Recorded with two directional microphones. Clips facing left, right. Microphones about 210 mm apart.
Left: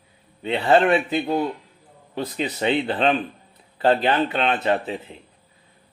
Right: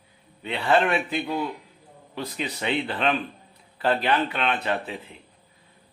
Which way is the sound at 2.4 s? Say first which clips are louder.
Left 5 dB; 35° left (ahead or behind).